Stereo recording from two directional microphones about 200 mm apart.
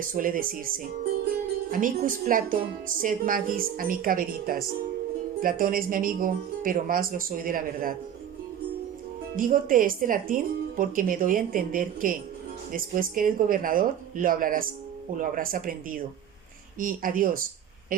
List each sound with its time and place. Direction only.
0.0 s a woman's voice: 45° right (ahead or behind)
9.3 s a woman's voice: 45° right (ahead or behind)